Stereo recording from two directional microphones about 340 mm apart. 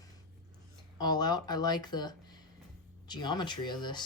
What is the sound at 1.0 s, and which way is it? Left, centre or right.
Speech, centre.